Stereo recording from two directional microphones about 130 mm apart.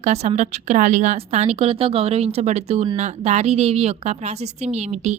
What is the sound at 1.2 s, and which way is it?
A woman's voice, 55° right (ahead or behind).